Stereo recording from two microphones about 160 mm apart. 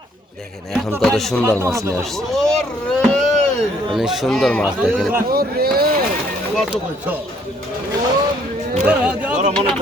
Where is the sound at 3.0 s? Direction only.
5° left (ahead or behind).